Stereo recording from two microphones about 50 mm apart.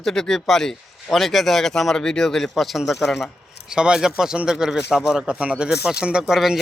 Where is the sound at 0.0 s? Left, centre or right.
Centre.